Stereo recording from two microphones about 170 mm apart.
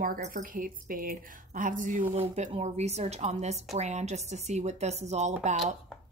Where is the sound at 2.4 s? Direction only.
40° right (ahead or behind).